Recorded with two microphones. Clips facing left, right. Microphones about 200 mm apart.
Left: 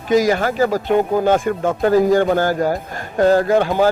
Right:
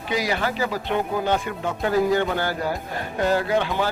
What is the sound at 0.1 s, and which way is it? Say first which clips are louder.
Speech: left 9 dB; 45° left (ahead or behind).